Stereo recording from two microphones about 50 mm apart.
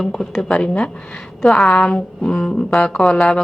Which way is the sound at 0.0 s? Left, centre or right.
Centre.